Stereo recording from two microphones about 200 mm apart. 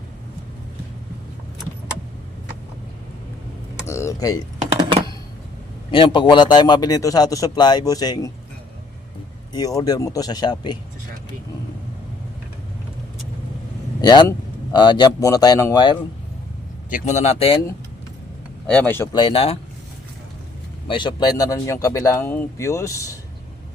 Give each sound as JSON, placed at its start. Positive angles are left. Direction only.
{"t": 3.8, "sound": "a sound", "side_deg": 15}
{"t": 5.9, "sound": "a man's voice", "side_deg": 25}
{"t": 9.5, "sound": "a man's voice", "side_deg": 20}
{"t": 14.0, "sound": "a man's voice", "side_deg": 20}
{"t": 16.9, "sound": "speech", "side_deg": 35}
{"t": 18.7, "sound": "speech", "side_deg": 10}
{"t": 19.1, "sound": "a man's voice", "side_deg": 25}
{"t": 20.8, "sound": "speech", "side_deg": 25}